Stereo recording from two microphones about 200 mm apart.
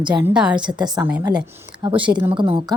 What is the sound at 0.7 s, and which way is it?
Speech, 20° right (ahead or behind).